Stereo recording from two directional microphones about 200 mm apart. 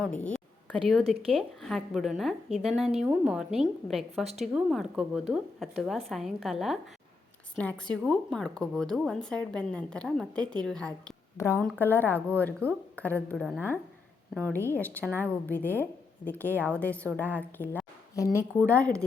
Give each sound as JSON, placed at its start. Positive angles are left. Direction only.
{"t": 0.0, "sound": "a woman's voice", "side_deg": 5}
{"t": 1.0, "sound": "speech", "side_deg": -30}
{"t": 1.3, "sound": "a woman's voice", "side_deg": 0}
{"t": 17.6, "sound": "a woman's voice", "side_deg": 25}